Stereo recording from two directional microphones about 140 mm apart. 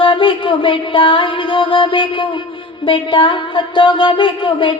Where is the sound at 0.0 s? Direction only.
40° left (ahead or behind).